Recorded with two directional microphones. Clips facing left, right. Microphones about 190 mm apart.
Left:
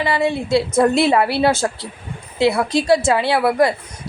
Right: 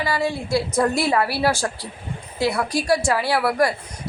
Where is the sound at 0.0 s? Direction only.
25° left (ahead or behind).